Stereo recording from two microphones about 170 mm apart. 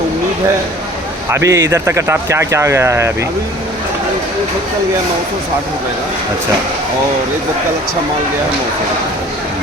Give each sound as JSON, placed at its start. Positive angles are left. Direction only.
{"t": 1.3, "sound": "speech", "side_deg": -15}